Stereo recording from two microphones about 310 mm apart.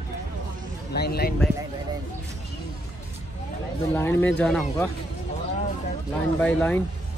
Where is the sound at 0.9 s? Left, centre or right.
Left.